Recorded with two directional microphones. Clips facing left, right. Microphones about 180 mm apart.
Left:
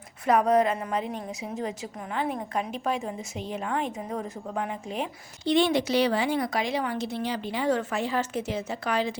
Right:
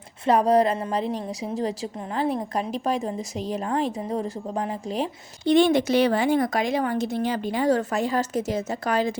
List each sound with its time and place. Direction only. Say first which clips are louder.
0.3 s a woman's voice: right 3 dB; 35° right (ahead or behind)
5.5 s speech: right 5 dB; 50° right (ahead or behind)